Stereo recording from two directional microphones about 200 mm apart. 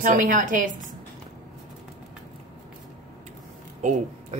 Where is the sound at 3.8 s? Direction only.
40° right (ahead or behind).